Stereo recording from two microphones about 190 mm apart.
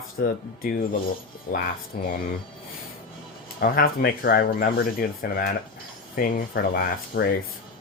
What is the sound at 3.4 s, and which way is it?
Speech, 50° left (ahead or behind).